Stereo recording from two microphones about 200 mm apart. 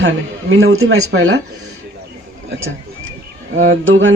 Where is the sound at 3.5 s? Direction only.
70° right (ahead or behind).